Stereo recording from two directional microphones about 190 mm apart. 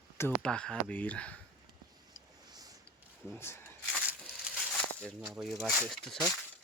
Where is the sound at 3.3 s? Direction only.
10° left (ahead or behind).